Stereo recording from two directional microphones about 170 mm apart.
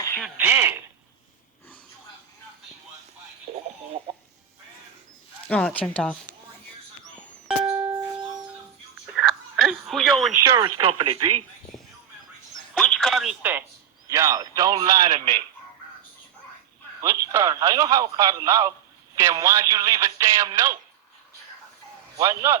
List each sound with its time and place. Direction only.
0.2 s a sound: 10° right (ahead or behind)
3.5 s a sound: 35° right (ahead or behind)
5.5 s speech: 5° left (ahead or behind)
7.4 s music: 5° right (ahead or behind)
9.0 s whispering: 5° right (ahead or behind)
10.3 s speech: 15° right (ahead or behind)
12.7 s telephone: 5° left (ahead or behind)
13.4 s a sound: 10° right (ahead or behind)
14.1 s speech: 15° right (ahead or behind)
17.0 s speech: 15° right (ahead or behind)
22.2 s a man's voice: 20° right (ahead or behind)